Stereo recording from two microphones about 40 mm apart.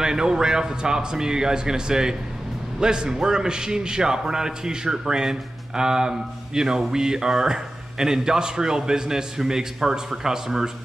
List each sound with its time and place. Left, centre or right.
0.0 s a man's voice: centre